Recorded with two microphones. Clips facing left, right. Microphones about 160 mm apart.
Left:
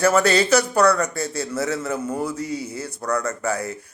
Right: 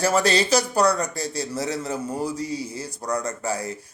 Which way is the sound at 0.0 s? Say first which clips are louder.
Left 3 dB; 30° right (ahead or behind).